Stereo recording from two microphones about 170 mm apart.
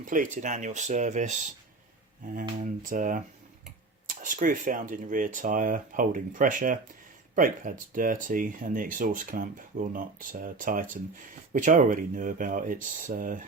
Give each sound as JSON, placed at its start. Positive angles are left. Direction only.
{"t": 0.0, "sound": "speech", "side_deg": -50}